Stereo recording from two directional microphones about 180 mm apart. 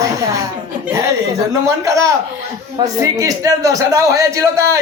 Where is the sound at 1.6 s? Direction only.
20° right (ahead or behind).